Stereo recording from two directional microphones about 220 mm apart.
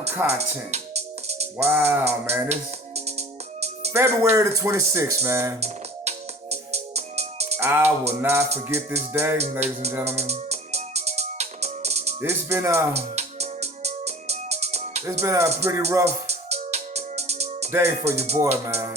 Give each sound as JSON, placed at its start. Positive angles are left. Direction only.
{"t": 0.1, "sound": "speech", "side_deg": -10}
{"t": 0.3, "sound": "music", "side_deg": -30}
{"t": 1.5, "sound": "speech", "side_deg": -10}
{"t": 2.5, "sound": "music", "side_deg": -30}
{"t": 3.9, "sound": "speech", "side_deg": -10}
{"t": 5.5, "sound": "music", "side_deg": -30}
{"t": 7.6, "sound": "speech", "side_deg": -10}
{"t": 9.4, "sound": "music", "side_deg": -30}
{"t": 12.2, "sound": "speech", "side_deg": -10}
{"t": 12.9, "sound": "music", "side_deg": -30}
{"t": 15.2, "sound": "speech", "side_deg": -15}
{"t": 16.2, "sound": "music", "side_deg": -30}
{"t": 17.7, "sound": "speech", "side_deg": -10}
{"t": 18.0, "sound": "music", "side_deg": -30}